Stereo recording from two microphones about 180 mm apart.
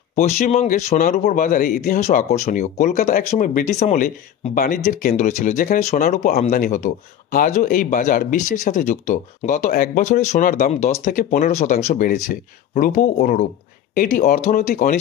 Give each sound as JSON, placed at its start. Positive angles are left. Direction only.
{"t": 0.1, "sound": "speech", "side_deg": 40}
{"t": 2.0, "sound": "speech", "side_deg": 40}